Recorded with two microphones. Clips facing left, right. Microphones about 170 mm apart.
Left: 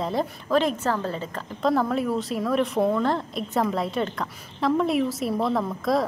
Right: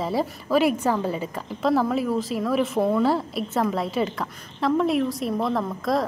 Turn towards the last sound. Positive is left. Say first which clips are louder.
# even
turn(degrees=0)  # may be behind; listen again after turning